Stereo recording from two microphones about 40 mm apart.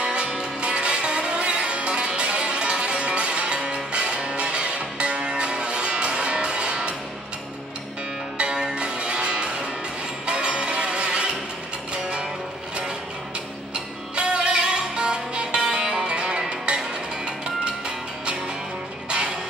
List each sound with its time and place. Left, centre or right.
0.0 s music: right
8.4 s music: right
14.1 s music: right